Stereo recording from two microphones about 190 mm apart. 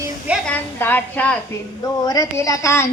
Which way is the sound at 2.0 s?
20° left (ahead or behind).